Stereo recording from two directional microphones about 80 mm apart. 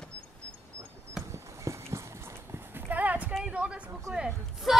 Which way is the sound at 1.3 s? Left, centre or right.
Right.